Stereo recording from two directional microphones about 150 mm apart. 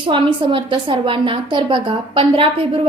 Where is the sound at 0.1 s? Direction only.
35° right (ahead or behind).